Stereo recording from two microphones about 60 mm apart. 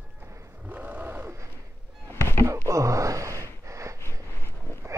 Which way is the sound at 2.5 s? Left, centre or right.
Right.